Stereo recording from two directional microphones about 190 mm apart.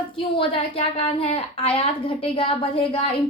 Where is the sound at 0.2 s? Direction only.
25° left (ahead or behind).